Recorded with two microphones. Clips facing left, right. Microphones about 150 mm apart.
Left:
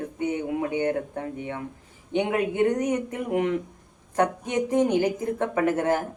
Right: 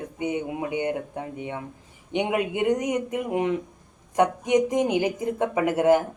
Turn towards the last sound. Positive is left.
turn(degrees=-15)  # may be behind; listen again after turning